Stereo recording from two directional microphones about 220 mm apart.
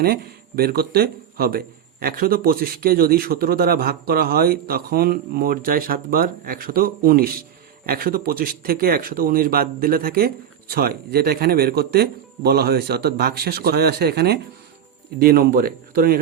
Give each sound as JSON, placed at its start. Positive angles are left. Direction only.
{"t": 0.0, "sound": "speech", "side_deg": -45}